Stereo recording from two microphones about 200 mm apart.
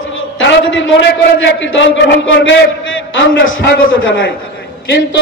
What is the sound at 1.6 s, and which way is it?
A man's voice, 65° left (ahead or behind).